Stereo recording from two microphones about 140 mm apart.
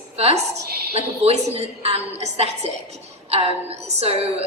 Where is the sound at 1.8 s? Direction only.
50° right (ahead or behind).